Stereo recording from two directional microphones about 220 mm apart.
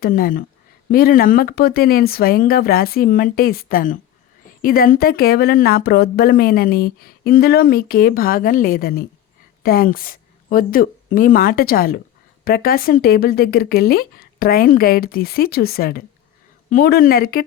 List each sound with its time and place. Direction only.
0.0 s a woman's voice: 40° left (ahead or behind)